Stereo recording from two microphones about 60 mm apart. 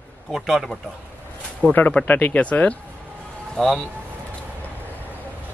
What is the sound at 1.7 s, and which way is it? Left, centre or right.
Speech, left.